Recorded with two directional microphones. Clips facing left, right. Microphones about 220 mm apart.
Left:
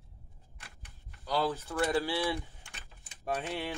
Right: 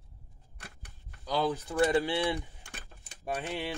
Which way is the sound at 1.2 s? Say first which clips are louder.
Right 1 dB; 15° right (ahead or behind).